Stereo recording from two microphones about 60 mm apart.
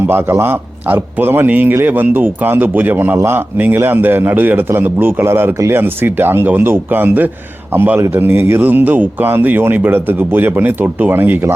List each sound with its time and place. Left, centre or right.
0.1 s speech: right